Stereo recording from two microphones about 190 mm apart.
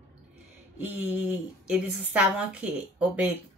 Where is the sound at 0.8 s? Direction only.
5° right (ahead or behind).